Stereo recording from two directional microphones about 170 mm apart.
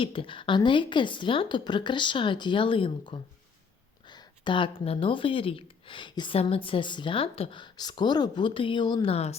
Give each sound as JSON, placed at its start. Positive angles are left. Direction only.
{"t": 0.0, "sound": "speech", "side_deg": 30}